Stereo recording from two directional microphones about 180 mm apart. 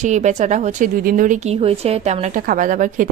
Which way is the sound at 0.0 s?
40° right (ahead or behind).